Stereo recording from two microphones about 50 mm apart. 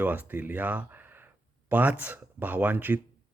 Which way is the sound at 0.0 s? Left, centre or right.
Right.